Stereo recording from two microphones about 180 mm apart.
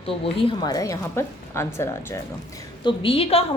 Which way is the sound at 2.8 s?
30° left (ahead or behind).